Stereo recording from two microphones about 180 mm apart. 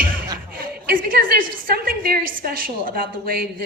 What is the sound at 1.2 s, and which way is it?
A woman's voice, 60° right (ahead or behind).